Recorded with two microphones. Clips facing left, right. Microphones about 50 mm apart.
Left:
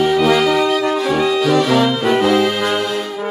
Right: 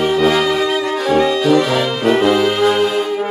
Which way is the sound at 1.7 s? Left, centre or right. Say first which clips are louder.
Left 3 dB; centre.